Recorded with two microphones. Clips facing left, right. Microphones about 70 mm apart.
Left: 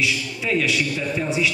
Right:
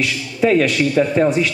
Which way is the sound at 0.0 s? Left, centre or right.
Right.